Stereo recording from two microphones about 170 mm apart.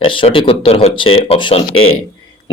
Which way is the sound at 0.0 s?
30° left (ahead or behind).